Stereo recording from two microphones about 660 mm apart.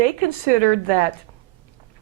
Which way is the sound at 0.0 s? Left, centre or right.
Right.